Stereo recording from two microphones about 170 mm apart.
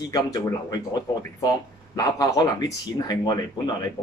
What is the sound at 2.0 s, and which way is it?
Speech, 20° left (ahead or behind).